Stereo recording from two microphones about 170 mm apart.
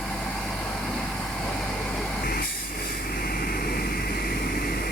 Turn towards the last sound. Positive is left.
turn(degrees=60)  # may be behind; listen again after turning